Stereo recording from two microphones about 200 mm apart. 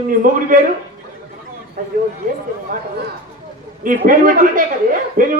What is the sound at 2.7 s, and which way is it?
Speech, 40° right (ahead or behind).